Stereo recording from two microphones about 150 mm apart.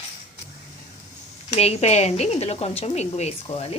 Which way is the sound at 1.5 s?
45° left (ahead or behind).